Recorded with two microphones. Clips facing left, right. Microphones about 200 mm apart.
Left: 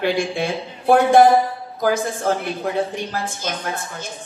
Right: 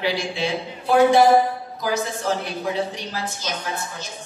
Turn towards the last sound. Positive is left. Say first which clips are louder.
# left 2 dB
turn(degrees=55)  # may be behind; listen again after turning